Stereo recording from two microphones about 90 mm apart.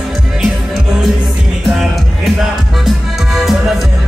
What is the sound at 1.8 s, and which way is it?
Music, 5° right (ahead or behind).